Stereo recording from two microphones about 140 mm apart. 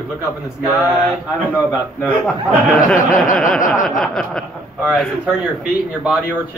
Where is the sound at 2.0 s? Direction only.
5° left (ahead or behind).